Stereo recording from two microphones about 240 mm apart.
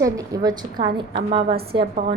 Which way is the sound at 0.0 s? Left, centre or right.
Centre.